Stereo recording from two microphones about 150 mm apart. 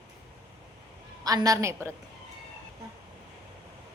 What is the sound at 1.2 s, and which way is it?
Speech, 25° right (ahead or behind).